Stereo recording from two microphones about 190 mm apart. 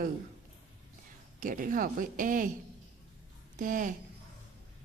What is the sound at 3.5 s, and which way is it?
Speech, 45° right (ahead or behind).